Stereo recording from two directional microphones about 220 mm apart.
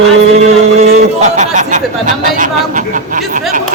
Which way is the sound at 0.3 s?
30° right (ahead or behind).